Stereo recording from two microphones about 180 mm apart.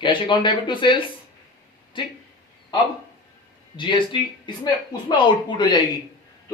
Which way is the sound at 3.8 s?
25° left (ahead or behind).